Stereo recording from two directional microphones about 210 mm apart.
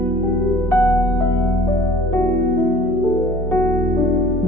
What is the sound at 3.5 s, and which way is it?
Music, 10° left (ahead or behind).